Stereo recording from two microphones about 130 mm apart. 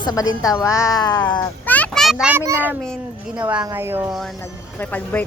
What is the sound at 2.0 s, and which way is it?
Speech, 5° right (ahead or behind).